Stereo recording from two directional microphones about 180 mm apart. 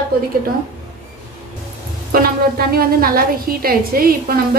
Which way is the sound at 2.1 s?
55° right (ahead or behind).